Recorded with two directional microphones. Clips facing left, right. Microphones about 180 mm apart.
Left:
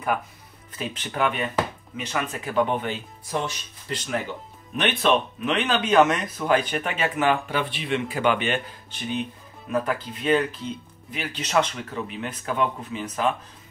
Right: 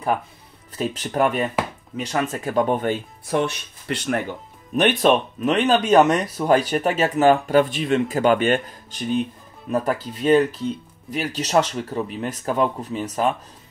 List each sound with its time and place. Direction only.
0.7 s speech: 40° right (ahead or behind)
3.3 s speech: 65° right (ahead or behind)
5.0 s speech: 40° right (ahead or behind)